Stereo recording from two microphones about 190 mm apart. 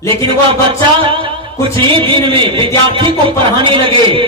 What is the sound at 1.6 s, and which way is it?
A man's voice, 30° right (ahead or behind).